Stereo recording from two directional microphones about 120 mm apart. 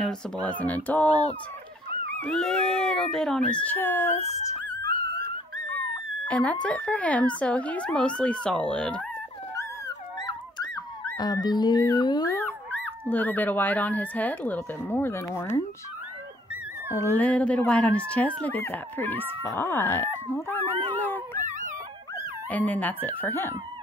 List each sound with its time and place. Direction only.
0.0 s speech: 10° left (ahead or behind)
2.2 s speech: 5° left (ahead or behind); by 4.2 s 20° left (ahead or behind)
6.2 s speech: 10° left (ahead or behind)
11.1 s speech: 35° left (ahead or behind)
13.1 s speech: 15° left (ahead or behind)
16.9 s speech: 20° left (ahead or behind)
21.4 s dog: 90° right
22.5 s speech: 15° left (ahead or behind)